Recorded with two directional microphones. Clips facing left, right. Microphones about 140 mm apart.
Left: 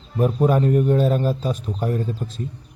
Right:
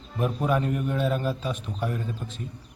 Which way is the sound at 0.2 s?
30° left (ahead or behind).